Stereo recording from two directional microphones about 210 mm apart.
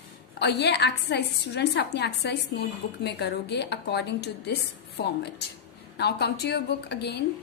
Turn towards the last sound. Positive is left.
turn(degrees=50)  # may be behind; listen again after turning